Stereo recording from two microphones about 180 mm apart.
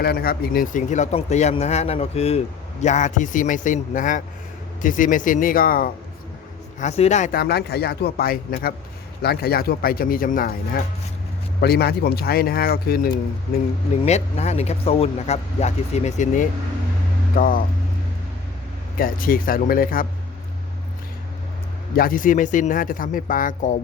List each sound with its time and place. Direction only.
0.0 s speech: 60° left (ahead or behind)
6.7 s speech: 40° left (ahead or behind)
7.3 s speech: 65° left (ahead or behind)
14.0 s speech: 35° left (ahead or behind)
18.9 s speech: 50° left (ahead or behind)
21.9 s speech: 50° left (ahead or behind)